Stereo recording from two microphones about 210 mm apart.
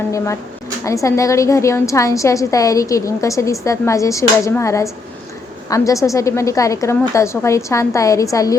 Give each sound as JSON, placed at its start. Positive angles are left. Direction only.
{"t": 0.9, "sound": "a woman's voice", "side_deg": 15}